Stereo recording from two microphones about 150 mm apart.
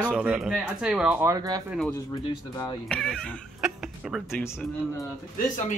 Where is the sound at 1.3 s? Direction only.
25° right (ahead or behind).